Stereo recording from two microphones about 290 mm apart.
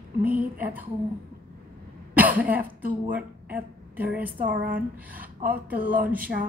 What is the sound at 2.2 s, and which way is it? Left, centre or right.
Cough, centre.